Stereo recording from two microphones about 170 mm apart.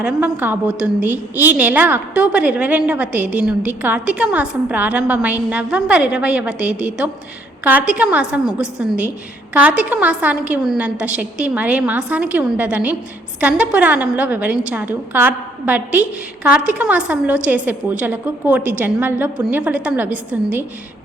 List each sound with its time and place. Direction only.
0.0 s a woman's voice: 10° right (ahead or behind)